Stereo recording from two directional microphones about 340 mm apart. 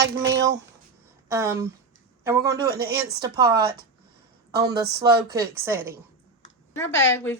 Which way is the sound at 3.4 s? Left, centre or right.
Right.